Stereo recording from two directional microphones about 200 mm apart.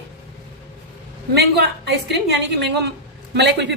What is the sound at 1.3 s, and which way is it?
A woman's voice, 55° right (ahead or behind).